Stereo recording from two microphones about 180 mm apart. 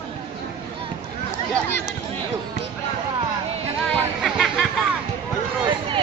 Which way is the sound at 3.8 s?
Centre (ahead or behind).